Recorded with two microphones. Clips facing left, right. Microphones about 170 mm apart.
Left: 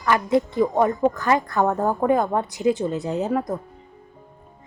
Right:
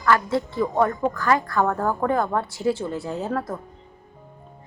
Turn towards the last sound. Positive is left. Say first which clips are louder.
# left 4 dB
turn(degrees=15)  # may be behind; listen again after turning